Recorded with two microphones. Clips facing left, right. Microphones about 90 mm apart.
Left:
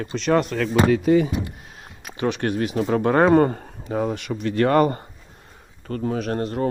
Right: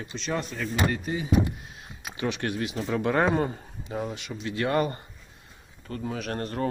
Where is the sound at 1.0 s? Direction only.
80° left.